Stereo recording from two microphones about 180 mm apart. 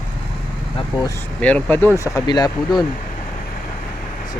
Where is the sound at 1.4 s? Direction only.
5° left (ahead or behind).